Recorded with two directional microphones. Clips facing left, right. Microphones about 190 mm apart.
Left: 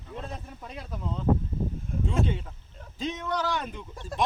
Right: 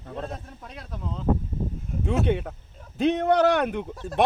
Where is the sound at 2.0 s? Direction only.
65° right (ahead or behind).